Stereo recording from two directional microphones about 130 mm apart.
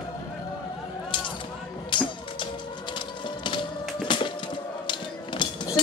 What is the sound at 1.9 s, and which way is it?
Music, 40° left (ahead or behind).